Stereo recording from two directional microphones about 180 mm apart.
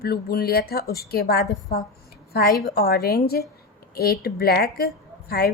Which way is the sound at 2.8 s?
60° left (ahead or behind).